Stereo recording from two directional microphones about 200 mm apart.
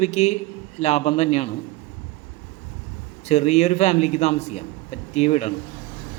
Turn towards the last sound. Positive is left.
turn(degrees=35)  # may be behind; listen again after turning